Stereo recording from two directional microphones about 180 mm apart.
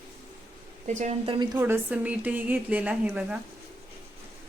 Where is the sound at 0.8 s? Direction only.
40° right (ahead or behind).